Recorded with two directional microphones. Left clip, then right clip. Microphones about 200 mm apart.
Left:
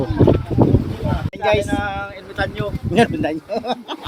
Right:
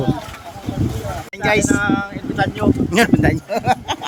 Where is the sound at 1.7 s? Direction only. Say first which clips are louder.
Right 4 dB; centre (ahead or behind).